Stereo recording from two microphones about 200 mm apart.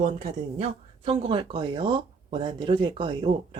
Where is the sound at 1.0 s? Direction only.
30° right (ahead or behind).